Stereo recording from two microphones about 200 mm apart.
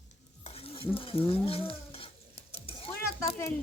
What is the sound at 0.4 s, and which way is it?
Stir, 30° left (ahead or behind).